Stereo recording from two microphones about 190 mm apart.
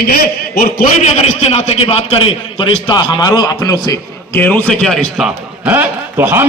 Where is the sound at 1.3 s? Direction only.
35° left (ahead or behind).